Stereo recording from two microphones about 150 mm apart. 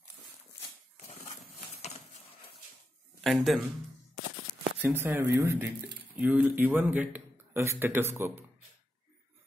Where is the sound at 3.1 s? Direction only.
Centre (ahead or behind).